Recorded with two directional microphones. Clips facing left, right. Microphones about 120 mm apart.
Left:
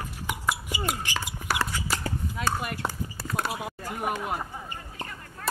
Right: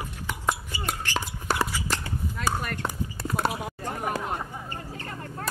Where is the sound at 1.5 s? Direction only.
25° right (ahead or behind).